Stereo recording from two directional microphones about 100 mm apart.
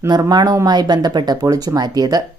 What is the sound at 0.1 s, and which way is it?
Speech, 45° right (ahead or behind).